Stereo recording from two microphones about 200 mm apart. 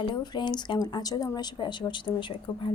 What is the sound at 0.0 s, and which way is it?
A woman's voice, 25° left (ahead or behind).